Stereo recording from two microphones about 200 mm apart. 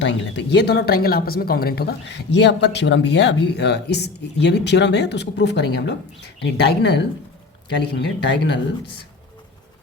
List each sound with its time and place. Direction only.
0.0 s speech: 60° left (ahead or behind)